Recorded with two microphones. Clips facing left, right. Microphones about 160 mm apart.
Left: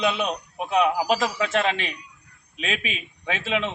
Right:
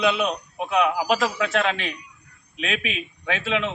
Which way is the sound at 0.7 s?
30° left (ahead or behind).